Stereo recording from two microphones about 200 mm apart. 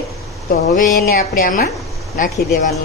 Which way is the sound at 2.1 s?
40° left (ahead or behind).